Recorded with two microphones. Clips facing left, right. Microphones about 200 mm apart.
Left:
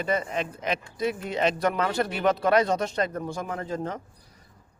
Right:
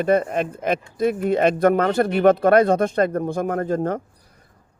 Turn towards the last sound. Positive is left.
turn(degrees=-55)  # may be behind; listen again after turning